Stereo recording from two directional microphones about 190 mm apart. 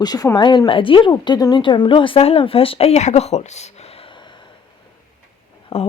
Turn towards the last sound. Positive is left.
turn(degrees=35)  # may be behind; listen again after turning